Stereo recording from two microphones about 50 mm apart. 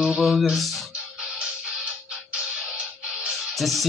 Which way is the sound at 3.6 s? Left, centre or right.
Centre.